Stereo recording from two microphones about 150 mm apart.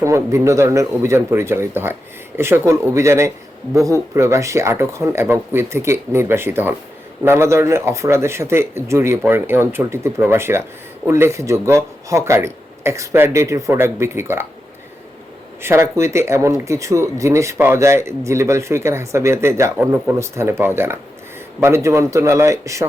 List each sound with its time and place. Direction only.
0.0 s speech: 20° right (ahead or behind)
15.6 s speech: 20° right (ahead or behind)